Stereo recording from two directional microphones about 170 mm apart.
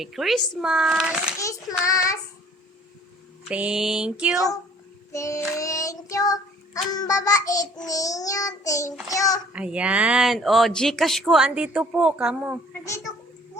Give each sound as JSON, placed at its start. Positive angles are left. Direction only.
{"t": 0.0, "sound": "speech", "side_deg": 0}
{"t": 1.4, "sound": "child singing", "side_deg": 20}
{"t": 3.5, "sound": "speech", "side_deg": -5}
{"t": 5.1, "sound": "child singing", "side_deg": 15}
{"t": 9.5, "sound": "speech", "side_deg": -5}